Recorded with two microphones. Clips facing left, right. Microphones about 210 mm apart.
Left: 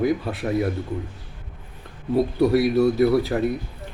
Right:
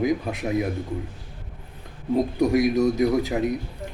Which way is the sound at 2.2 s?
15° right (ahead or behind).